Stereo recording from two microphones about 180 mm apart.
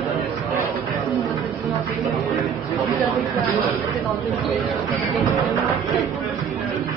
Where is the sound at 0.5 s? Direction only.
15° right (ahead or behind).